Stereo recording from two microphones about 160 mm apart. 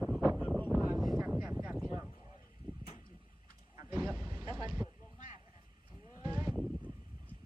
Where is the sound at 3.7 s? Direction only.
20° right (ahead or behind).